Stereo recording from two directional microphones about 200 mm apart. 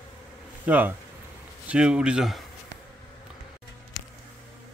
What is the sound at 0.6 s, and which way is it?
Speech, 10° right (ahead or behind).